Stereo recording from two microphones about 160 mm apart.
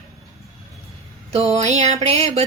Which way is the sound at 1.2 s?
40° right (ahead or behind).